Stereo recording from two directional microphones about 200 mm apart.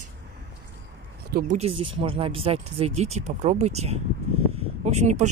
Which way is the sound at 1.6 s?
25° right (ahead or behind).